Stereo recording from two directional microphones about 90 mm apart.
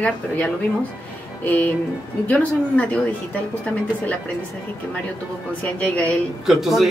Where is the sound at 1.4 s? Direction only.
20° left (ahead or behind).